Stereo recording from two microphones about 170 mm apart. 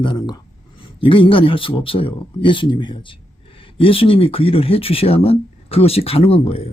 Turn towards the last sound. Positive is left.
turn(degrees=35)  # may be behind; listen again after turning